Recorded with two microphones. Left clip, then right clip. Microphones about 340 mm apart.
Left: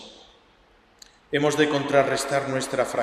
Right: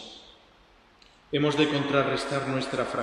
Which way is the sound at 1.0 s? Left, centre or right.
Left.